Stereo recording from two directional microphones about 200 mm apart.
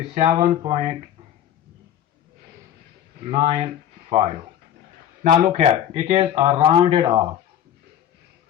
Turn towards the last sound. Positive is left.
turn(degrees=-25)  # may be behind; listen again after turning